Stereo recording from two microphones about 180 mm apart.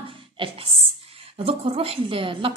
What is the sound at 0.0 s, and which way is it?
Music, 30° right (ahead or behind).